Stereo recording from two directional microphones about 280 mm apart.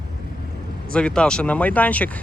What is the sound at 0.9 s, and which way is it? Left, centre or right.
Speech, centre.